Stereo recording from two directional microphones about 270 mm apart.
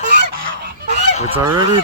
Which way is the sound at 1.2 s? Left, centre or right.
Centre.